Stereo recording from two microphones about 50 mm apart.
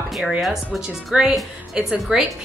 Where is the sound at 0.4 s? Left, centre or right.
Centre.